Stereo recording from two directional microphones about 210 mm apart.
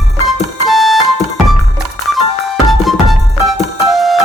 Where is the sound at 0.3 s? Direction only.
Centre (ahead or behind).